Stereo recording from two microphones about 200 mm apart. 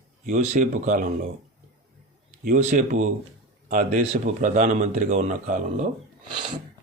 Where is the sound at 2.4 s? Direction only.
40° right (ahead or behind).